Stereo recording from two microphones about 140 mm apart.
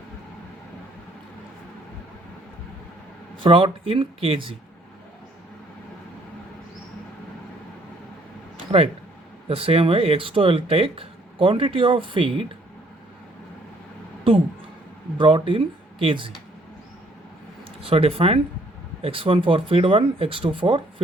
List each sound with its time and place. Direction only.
3.3 s speech: 40° right (ahead or behind)
9.5 s speech: 45° right (ahead or behind)
15.2 s speech: 40° right (ahead or behind)
17.8 s speech: 45° right (ahead or behind)